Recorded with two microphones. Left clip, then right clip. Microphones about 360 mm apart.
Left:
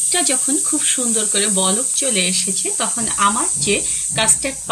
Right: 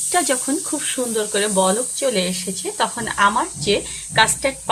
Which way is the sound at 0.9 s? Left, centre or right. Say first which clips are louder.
Right 2 dB; right.